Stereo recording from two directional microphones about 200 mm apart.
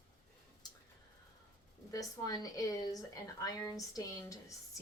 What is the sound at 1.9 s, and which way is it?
A woman's voice, 15° left (ahead or behind).